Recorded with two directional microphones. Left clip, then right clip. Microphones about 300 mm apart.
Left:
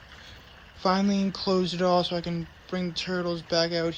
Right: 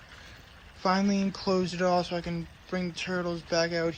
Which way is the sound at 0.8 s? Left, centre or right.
Centre.